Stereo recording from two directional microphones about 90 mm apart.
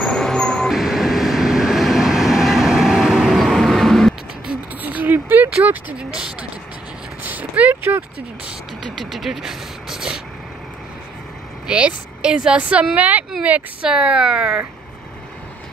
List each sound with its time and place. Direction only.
0.0 s vehicle: 5° left (ahead or behind)
4.8 s a sound: 20° right (ahead or behind)
7.2 s vehicle: 20° right (ahead or behind)
8.9 s speech: centre (ahead or behind)
11.6 s speech: 10° right (ahead or behind)